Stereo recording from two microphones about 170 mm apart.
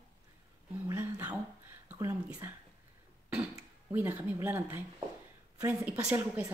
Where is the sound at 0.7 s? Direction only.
15° right (ahead or behind).